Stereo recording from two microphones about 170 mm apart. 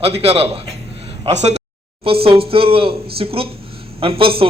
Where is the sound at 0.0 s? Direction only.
35° right (ahead or behind).